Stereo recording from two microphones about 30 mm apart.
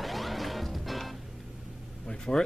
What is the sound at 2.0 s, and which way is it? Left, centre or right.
Vehicle, left.